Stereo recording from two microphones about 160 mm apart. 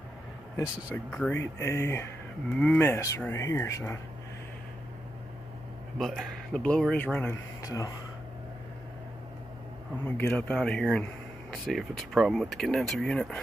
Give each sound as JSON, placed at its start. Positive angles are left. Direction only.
{"t": 0.9, "sound": "speech", "side_deg": 5}
{"t": 1.4, "sound": "speech", "side_deg": 15}
{"t": 5.9, "sound": "speech", "side_deg": 0}
{"t": 7.6, "sound": "speech", "side_deg": 20}
{"t": 10.0, "sound": "speech", "side_deg": 15}